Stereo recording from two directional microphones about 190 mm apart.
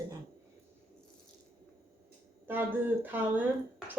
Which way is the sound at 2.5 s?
10° right (ahead or behind).